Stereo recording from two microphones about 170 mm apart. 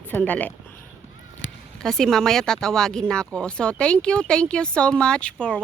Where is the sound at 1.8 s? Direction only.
Centre (ahead or behind).